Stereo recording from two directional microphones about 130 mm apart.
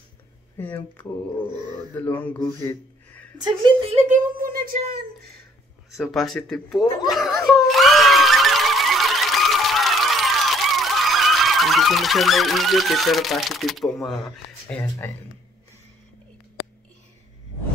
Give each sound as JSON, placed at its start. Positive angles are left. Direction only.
{"t": 0.6, "sound": "speech", "side_deg": 15}
{"t": 3.3, "sound": "a woman's voice", "side_deg": -35}
{"t": 4.1, "sound": "a woman's voice", "side_deg": -90}
{"t": 5.9, "sound": "speech", "side_deg": 0}
{"t": 7.1, "sound": "screaming", "side_deg": 0}